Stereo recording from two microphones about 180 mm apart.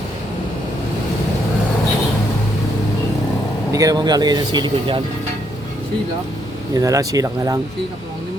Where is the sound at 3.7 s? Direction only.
20° right (ahead or behind).